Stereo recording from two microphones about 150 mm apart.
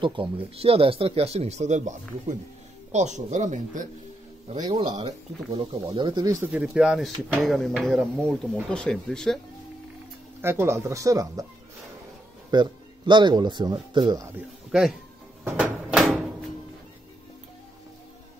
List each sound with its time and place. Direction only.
0.0 s speech: 35° right (ahead or behind); by 3.9 s 55° right (ahead or behind)
4.5 s speech: 45° right (ahead or behind)
5.5 s speech: 35° right (ahead or behind)
6.6 s speech: 5° right (ahead or behind)
10.4 s speech: 15° right (ahead or behind)
12.4 s speech: 30° right (ahead or behind)
14.7 s speech: 5° right (ahead or behind)
15.4 s a sound: 5° right (ahead or behind)